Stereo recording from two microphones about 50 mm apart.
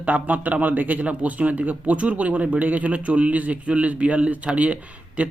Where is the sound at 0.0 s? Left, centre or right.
Right.